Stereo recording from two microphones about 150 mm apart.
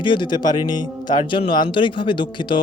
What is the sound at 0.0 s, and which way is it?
Speech, 30° left (ahead or behind).